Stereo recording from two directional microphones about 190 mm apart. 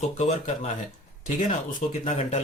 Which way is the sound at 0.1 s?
35° left (ahead or behind).